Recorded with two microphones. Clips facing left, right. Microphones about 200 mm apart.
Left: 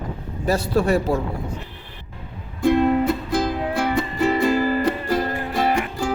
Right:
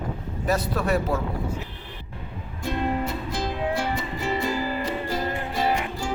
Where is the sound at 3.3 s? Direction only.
60° left (ahead or behind).